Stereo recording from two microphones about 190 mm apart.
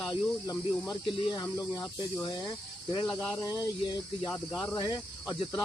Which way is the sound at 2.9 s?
25° left (ahead or behind).